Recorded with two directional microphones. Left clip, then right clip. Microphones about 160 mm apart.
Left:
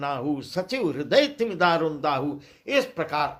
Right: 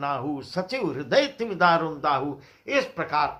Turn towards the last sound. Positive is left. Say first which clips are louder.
# even
turn(degrees=35)  # may be behind; listen again after turning